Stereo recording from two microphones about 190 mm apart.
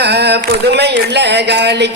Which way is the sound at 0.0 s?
60° right (ahead or behind).